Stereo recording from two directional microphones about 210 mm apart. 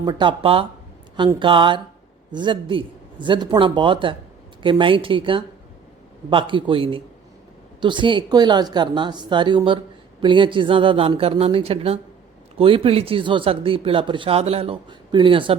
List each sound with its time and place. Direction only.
0.0 s a woman's voice: 20° right (ahead or behind)